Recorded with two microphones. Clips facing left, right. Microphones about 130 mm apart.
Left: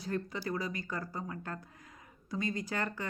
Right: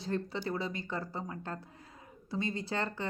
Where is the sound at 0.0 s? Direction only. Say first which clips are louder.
Right 1 dB; 30° right (ahead or behind).